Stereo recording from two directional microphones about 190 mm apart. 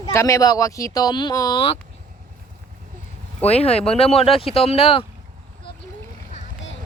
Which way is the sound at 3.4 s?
35° left (ahead or behind).